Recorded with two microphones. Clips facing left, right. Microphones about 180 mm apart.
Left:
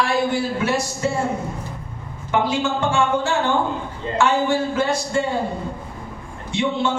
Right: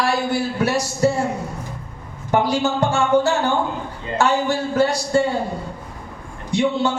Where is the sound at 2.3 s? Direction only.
40° right (ahead or behind).